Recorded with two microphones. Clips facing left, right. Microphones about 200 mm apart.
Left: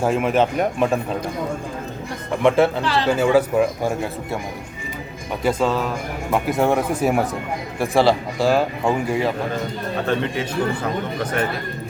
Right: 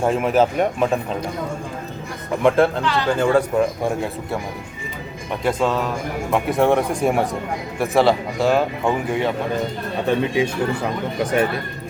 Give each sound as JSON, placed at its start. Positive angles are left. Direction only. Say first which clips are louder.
{"t": 0.0, "sound": "speech", "louder": "right 1 dB", "side_deg": 0}
{"t": 2.4, "sound": "speech", "louder": "even", "side_deg": 0}
{"t": 2.8, "sound": "speech", "louder": "left 1 dB", "side_deg": 30}
{"t": 3.1, "sound": "speech", "louder": "left 1 dB", "side_deg": 5}
{"t": 5.4, "sound": "speech", "louder": "even", "side_deg": 0}
{"t": 10.1, "sound": "speech", "louder": "right 5 dB", "side_deg": -10}